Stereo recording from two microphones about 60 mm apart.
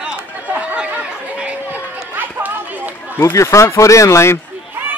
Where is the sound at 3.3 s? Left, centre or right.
Left.